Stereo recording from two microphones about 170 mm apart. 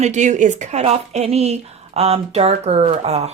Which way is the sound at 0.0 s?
45° right (ahead or behind).